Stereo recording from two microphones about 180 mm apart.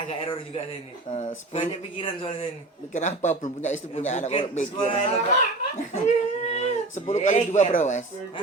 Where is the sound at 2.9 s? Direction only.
40° left (ahead or behind).